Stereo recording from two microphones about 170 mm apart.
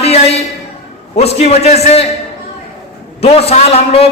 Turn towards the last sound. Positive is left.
turn(degrees=35)  # may be behind; listen again after turning